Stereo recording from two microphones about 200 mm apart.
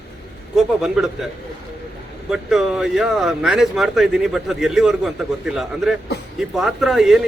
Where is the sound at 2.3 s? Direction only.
Centre (ahead or behind).